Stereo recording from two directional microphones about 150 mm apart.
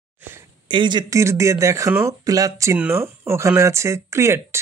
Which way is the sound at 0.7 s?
30° right (ahead or behind).